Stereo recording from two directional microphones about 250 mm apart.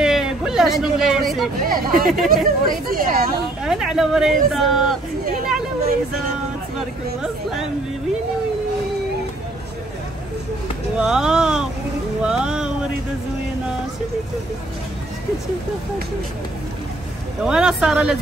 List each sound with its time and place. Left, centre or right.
0.0 s a sound: centre
1.6 s speech: right
3.6 s a man's voice: centre
11.0 s a man's voice: centre
12.2 s music: centre
17.5 s a man's voice: centre